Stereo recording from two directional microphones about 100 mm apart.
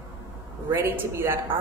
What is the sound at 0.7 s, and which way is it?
Speech, 20° right (ahead or behind).